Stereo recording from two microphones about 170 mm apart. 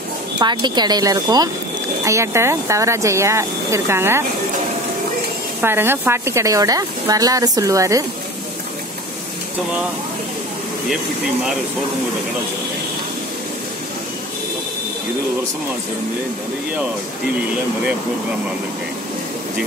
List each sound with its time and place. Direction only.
0.4 s speech: 25° right (ahead or behind)
5.6 s speech: 15° right (ahead or behind)